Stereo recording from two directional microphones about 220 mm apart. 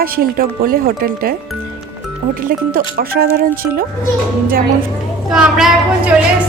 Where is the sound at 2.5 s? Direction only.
40° right (ahead or behind).